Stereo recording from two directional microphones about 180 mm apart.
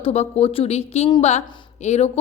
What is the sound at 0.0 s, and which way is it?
A woman's voice, 35° left (ahead or behind).